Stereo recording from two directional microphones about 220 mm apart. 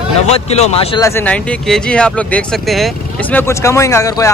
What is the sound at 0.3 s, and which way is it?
Speech, 30° left (ahead or behind).